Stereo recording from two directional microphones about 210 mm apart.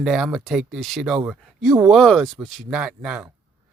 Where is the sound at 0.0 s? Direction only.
Centre (ahead or behind).